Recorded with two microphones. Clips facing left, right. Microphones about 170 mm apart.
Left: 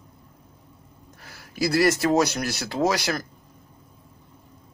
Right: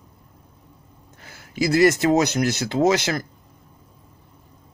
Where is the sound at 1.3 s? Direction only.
20° right (ahead or behind).